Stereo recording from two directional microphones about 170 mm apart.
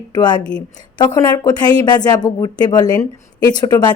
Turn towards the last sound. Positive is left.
turn(degrees=25)  # may be behind; listen again after turning